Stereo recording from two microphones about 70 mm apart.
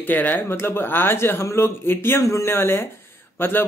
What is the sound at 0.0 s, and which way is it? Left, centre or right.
Speech, left.